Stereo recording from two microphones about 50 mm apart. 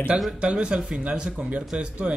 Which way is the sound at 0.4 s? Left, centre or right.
Right.